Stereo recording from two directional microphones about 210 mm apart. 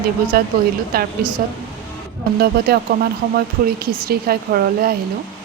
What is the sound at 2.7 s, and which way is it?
Speech, 45° right (ahead or behind).